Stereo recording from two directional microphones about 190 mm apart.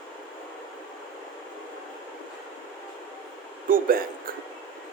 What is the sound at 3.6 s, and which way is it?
Speech, 50° right (ahead or behind).